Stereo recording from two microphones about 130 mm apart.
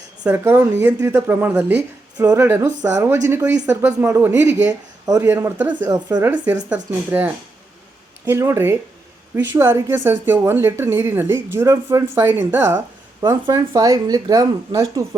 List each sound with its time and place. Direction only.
0.3 s a woman's voice: 20° right (ahead or behind)
5.9 s a woman's voice: 30° right (ahead or behind)
6.2 s a woman's voice: 10° right (ahead or behind)
13.5 s a woman's voice: 25° right (ahead or behind)